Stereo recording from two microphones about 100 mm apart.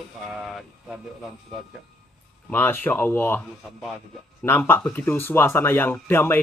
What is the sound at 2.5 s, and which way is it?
Speech, 20° left (ahead or behind).